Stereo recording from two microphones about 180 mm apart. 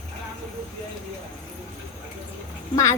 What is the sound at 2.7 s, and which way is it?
Speech, 20° left (ahead or behind).